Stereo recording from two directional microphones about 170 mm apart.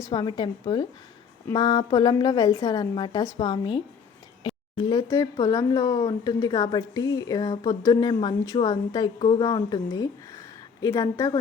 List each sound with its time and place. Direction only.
0.1 s speech: 25° left (ahead or behind)